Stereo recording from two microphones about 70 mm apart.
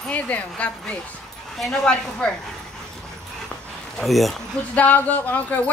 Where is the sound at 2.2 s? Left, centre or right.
Centre.